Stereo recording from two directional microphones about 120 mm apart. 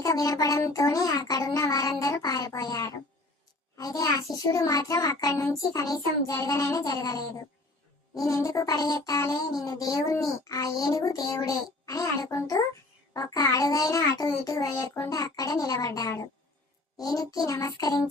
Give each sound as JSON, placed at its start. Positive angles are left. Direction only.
{"t": 0.0, "sound": "speech", "side_deg": 30}
{"t": 17.0, "sound": "child singing", "side_deg": 30}